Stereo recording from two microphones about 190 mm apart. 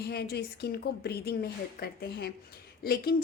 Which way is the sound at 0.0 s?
55° left (ahead or behind).